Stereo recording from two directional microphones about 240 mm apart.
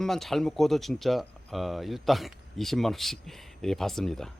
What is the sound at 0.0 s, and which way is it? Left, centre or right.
Speech, centre.